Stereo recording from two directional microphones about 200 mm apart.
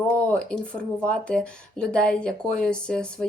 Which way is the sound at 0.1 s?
5° left (ahead or behind).